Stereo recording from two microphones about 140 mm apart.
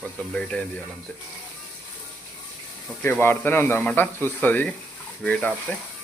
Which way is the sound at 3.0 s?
15° left (ahead or behind).